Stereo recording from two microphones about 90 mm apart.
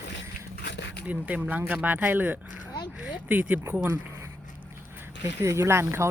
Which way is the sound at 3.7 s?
25° right (ahead or behind).